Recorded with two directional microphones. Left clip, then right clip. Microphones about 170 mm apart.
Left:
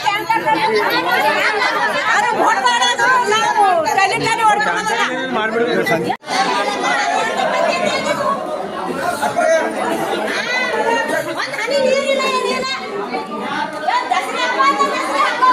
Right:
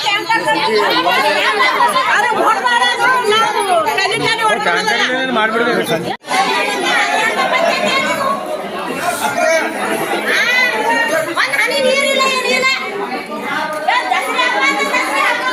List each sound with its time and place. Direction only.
3.9 s chatter: 60° left (ahead or behind)